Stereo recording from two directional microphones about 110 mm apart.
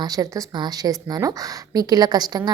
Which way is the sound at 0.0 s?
35° right (ahead or behind).